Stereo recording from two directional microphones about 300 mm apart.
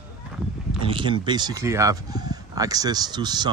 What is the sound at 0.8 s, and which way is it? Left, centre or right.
Speech, centre.